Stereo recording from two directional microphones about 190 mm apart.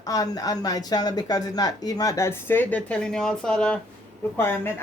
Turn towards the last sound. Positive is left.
turn(degrees=10)  # may be behind; listen again after turning